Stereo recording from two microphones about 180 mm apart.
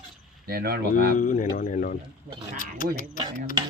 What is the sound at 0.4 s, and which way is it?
Speech, 60° right (ahead or behind).